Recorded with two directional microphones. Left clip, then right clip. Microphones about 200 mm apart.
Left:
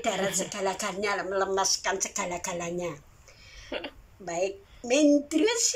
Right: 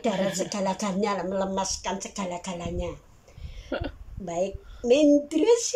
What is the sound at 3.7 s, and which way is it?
Speech, 20° right (ahead or behind).